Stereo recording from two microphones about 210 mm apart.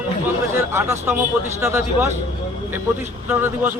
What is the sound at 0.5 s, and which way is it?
A man's voice, 10° right (ahead or behind).